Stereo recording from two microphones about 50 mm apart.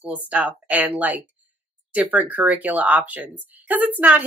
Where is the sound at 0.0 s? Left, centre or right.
Right.